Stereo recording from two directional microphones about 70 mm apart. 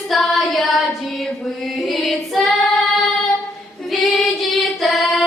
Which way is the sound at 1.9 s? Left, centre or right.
Centre.